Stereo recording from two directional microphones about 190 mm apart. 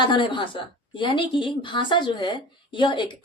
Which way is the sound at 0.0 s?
25° left (ahead or behind).